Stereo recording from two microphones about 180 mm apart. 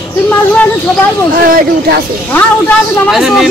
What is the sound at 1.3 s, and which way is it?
Speech, 50° right (ahead or behind).